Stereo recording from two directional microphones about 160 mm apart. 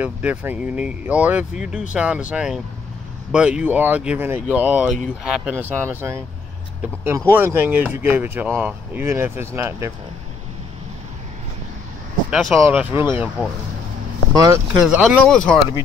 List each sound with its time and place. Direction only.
0.0 s speech: 10° right (ahead or behind)
12.3 s speech: centre (ahead or behind)
12.6 s speech: 15° right (ahead or behind)
14.3 s speech: 20° right (ahead or behind)
14.8 s speech: 5° right (ahead or behind)
15.1 s speech: 5° left (ahead or behind)